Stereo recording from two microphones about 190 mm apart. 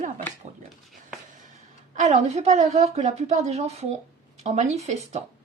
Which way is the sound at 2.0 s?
35° right (ahead or behind).